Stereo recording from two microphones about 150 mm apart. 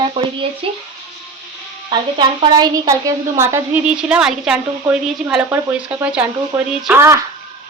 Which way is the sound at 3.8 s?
5° right (ahead or behind).